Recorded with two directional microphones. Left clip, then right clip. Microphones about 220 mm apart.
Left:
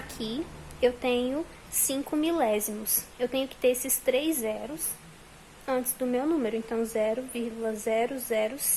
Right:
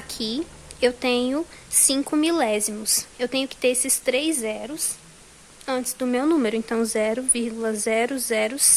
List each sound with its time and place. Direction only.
0.2 s a woman's voice: centre (ahead or behind)
0.8 s a woman's voice: 20° right (ahead or behind)
5.8 s a woman's voice: 25° right (ahead or behind)